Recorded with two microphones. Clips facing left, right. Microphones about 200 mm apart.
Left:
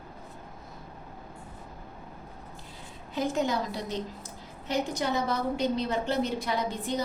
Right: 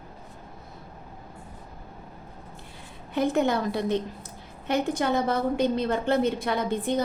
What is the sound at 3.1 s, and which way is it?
A woman's voice, 60° right (ahead or behind).